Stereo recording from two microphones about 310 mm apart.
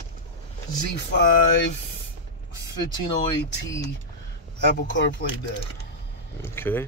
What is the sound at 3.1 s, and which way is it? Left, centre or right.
Speech, centre.